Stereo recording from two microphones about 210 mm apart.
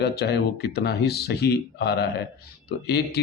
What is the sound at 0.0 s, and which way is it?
A man's voice, 50° left (ahead or behind).